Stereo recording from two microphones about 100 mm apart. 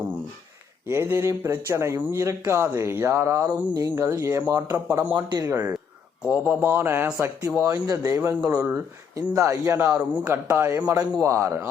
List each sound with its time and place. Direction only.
0.9 s speech: 25° right (ahead or behind)
3.5 s speech: 40° right (ahead or behind)
5.1 s speech: 40° right (ahead or behind)
5.5 s speech: 25° right (ahead or behind)
7.9 s speech: 30° right (ahead or behind)